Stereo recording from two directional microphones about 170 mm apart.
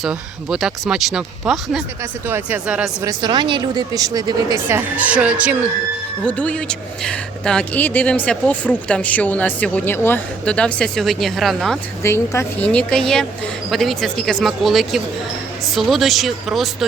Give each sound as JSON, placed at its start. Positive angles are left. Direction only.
{"t": 0.0, "sound": "a woman's voice", "side_deg": -5}
{"t": 3.0, "sound": "speech", "side_deg": -25}
{"t": 4.7, "sound": "a woman's voice", "side_deg": -10}
{"t": 6.2, "sound": "speech", "side_deg": 10}
{"t": 12.0, "sound": "a woman's voice", "side_deg": 15}